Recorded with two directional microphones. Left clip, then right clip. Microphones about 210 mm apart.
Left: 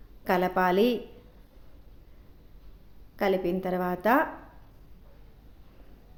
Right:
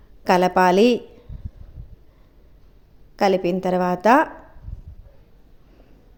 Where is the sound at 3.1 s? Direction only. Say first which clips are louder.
Right 8 dB; 35° right (ahead or behind).